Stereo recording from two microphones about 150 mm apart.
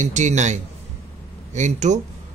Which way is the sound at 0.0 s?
55° right (ahead or behind).